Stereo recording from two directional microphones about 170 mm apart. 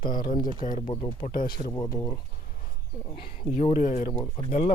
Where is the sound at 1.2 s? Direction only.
60° left (ahead or behind).